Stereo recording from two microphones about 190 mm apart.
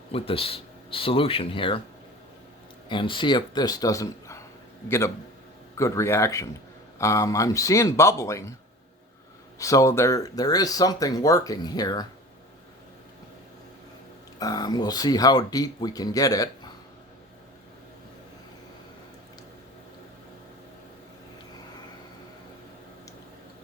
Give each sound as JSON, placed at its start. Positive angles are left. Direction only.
{"t": 0.1, "sound": "speech", "side_deg": 30}
{"t": 2.9, "sound": "a man's voice", "side_deg": 25}
{"t": 9.6, "sound": "speech", "side_deg": 15}
{"t": 14.3, "sound": "speech", "side_deg": 20}